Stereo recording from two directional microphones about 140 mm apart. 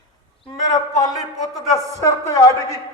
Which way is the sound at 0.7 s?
25° left (ahead or behind).